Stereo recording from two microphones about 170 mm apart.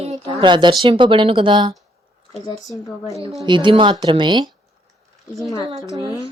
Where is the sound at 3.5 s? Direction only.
30° right (ahead or behind).